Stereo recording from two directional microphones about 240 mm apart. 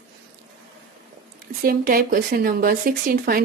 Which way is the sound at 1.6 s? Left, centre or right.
Right.